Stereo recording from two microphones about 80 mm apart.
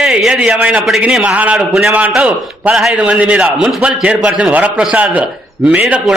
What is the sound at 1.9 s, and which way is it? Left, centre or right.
A man's voice, right.